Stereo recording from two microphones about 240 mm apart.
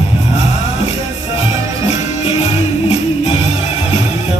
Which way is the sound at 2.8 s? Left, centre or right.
Left.